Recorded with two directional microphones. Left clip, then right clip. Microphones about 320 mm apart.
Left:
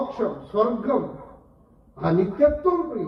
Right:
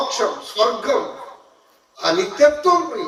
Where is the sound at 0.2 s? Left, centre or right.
Right.